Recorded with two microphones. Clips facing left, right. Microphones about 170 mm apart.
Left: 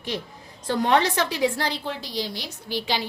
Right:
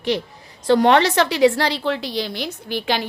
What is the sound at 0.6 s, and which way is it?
A woman's voice, 75° right (ahead or behind).